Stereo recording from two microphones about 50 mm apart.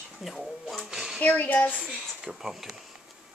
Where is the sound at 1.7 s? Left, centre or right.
Centre.